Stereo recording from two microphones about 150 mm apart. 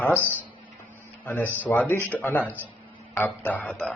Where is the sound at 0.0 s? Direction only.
15° left (ahead or behind).